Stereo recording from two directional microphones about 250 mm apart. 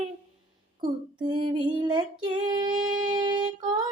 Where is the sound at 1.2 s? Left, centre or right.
Centre.